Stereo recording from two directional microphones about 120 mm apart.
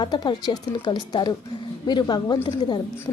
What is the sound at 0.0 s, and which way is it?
A woman's voice, 40° left (ahead or behind).